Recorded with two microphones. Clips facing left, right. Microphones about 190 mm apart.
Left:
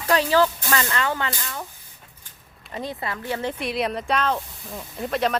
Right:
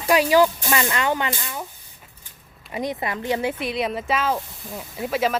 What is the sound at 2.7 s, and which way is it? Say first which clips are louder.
Speech: right 4 dB; 15° right (ahead or behind).